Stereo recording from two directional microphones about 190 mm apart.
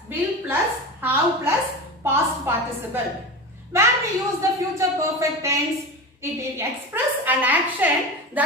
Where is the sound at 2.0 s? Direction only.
10° right (ahead or behind).